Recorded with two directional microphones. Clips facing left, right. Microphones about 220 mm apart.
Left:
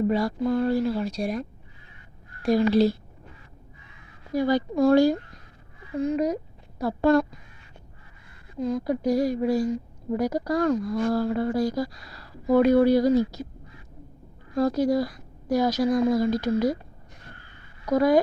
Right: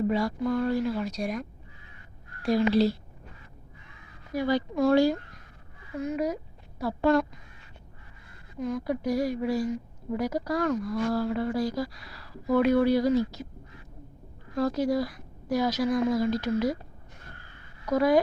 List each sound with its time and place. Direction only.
0.1 s speech: 35° left (ahead or behind)
2.4 s speech: 50° left (ahead or behind)
4.4 s speech: 45° left (ahead or behind)
6.1 s speech: 40° left (ahead or behind)
8.5 s a woman's voice: 30° left (ahead or behind)
9.1 s speech: 40° left (ahead or behind)
14.5 s a woman's voice: 40° left (ahead or behind)
17.8 s speech: 45° left (ahead or behind)